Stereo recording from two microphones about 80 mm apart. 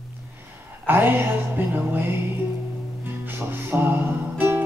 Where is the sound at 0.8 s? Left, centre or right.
Right.